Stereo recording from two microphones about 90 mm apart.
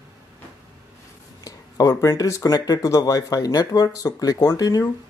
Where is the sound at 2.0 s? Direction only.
35° left (ahead or behind).